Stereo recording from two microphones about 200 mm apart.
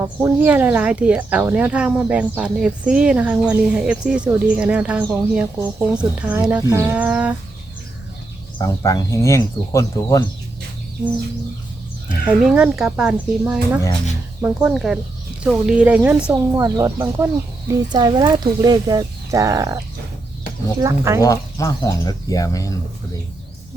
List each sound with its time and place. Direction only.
0.0 s speech: 10° right (ahead or behind)
8.5 s speech: 15° left (ahead or behind)
12.0 s speech: 5° right (ahead or behind)
21.2 s speech: 15° left (ahead or behind)